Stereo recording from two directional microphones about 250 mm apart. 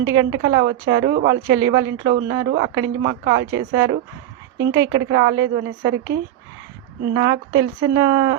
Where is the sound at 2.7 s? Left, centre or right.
Right.